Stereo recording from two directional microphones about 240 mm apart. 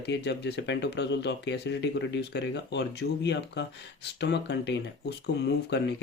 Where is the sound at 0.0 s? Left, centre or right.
Left.